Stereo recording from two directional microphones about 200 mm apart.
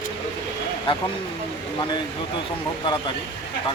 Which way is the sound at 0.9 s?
25° left (ahead or behind).